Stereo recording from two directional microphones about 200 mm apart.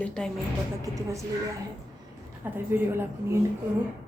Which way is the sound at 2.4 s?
10° right (ahead or behind).